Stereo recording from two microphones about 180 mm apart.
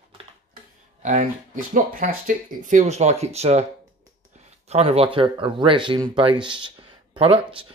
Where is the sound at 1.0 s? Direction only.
45° right (ahead or behind).